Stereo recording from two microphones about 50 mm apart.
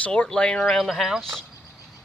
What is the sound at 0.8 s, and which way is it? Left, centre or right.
Speech, centre.